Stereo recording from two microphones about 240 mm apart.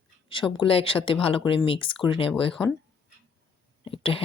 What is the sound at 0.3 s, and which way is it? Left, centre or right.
Speech, left.